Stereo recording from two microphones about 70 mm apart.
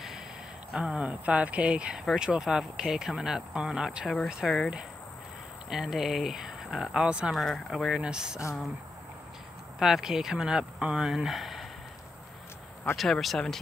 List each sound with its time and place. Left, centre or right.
0.7 s speech: centre
4.4 s speech: centre
5.7 s speech: centre
7.2 s speech: centre
8.0 s speech: centre
9.8 s speech: centre
12.9 s speech: centre